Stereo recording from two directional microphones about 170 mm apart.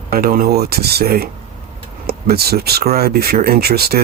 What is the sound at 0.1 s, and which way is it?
Speech, 60° right (ahead or behind).